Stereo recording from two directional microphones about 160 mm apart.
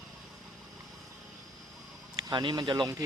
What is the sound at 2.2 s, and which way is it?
Speech, 25° right (ahead or behind).